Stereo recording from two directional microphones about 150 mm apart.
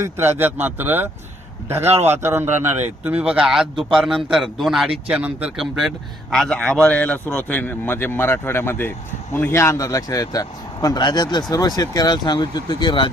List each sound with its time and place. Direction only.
0.0 s a man's voice: 15° right (ahead or behind); by 13.1 s 30° left (ahead or behind)